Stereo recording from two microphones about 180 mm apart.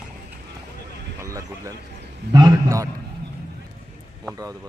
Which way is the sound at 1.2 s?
15° right (ahead or behind).